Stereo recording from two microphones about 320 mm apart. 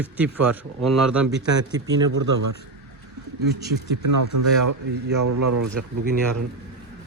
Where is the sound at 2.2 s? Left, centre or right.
Right.